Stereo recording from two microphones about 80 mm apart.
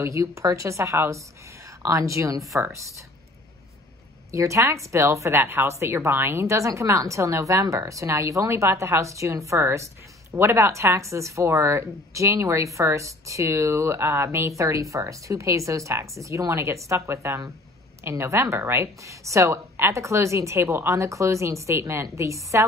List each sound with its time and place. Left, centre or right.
0.0 s speech: right
4.3 s speech: right